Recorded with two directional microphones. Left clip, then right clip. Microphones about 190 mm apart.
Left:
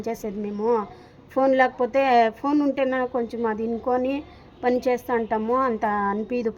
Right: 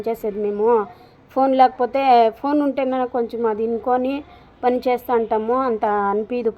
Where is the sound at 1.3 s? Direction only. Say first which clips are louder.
Right 4 dB; 10° left (ahead or behind).